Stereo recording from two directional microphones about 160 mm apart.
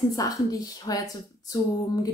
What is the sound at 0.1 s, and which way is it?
Speech, 20° left (ahead or behind).